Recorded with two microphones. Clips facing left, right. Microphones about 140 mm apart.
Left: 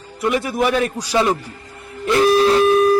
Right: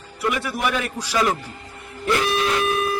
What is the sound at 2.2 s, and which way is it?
Music, 35° left (ahead or behind).